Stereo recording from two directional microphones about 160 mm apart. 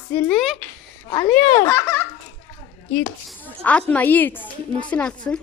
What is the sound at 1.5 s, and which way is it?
Speech, 15° left (ahead or behind).